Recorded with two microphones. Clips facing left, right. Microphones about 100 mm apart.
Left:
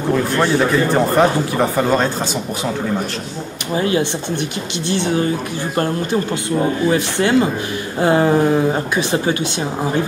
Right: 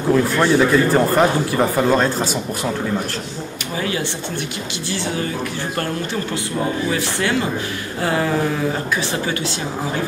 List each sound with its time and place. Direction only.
0.1 s speech: 5° left (ahead or behind)
3.7 s speech: 30° left (ahead or behind)
4.8 s speech: 20° left (ahead or behind)
7.2 s speech: 20° left (ahead or behind)